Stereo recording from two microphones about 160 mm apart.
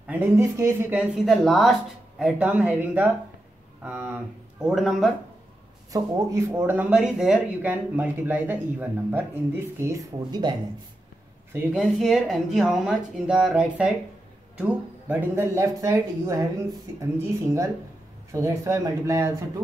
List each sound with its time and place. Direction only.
0.0 s speech: 10° right (ahead or behind)
1.2 s speech: centre (ahead or behind)
5.9 s speech: 20° right (ahead or behind)
11.5 s speech: 5° right (ahead or behind); by 19.3 s 20° right (ahead or behind)